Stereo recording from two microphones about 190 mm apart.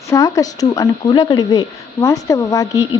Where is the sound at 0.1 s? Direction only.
20° left (ahead or behind).